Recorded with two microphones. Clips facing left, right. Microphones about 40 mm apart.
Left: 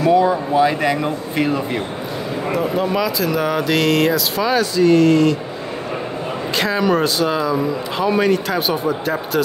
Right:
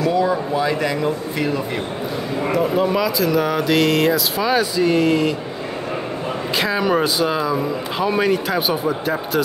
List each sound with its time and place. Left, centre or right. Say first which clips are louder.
0.0 s speech: left 4 dB; left
2.5 s a man's voice: right 1 dB; centre
6.5 s a man's voice: left 1 dB; centre